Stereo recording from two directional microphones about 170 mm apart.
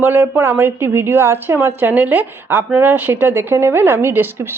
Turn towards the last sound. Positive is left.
turn(degrees=-15)  # may be behind; listen again after turning